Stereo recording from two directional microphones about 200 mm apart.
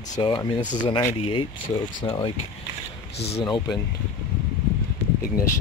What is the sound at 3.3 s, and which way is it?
Speech, 20° left (ahead or behind).